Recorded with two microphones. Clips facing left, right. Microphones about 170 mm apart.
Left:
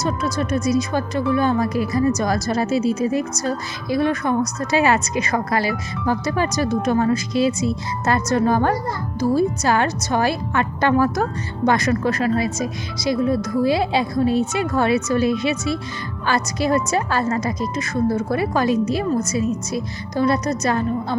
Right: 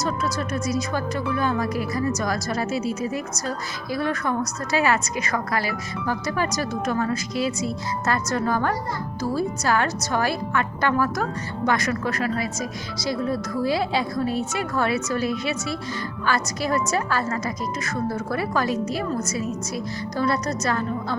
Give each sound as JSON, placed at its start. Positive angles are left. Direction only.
{"t": 0.0, "sound": "speech", "side_deg": 20}